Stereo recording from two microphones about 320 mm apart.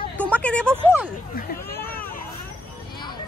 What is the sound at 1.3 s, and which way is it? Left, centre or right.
Speech, left.